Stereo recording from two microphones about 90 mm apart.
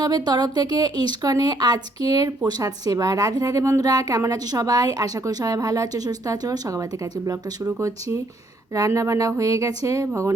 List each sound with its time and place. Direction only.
0.0 s speech: 50° right (ahead or behind); by 10.1 s 35° right (ahead or behind)